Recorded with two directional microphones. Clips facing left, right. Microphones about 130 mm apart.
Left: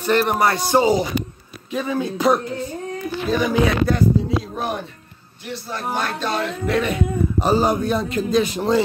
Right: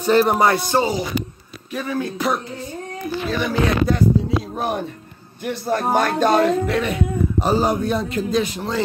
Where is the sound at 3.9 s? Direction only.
20° right (ahead or behind).